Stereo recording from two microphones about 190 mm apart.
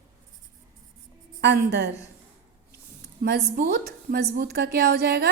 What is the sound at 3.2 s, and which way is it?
A woman's voice, 55° right (ahead or behind).